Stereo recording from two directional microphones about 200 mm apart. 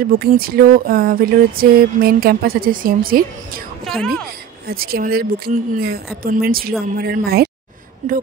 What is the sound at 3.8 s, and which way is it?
Speech, centre (ahead or behind).